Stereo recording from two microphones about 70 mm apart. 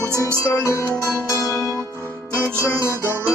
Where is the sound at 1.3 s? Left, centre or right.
Left.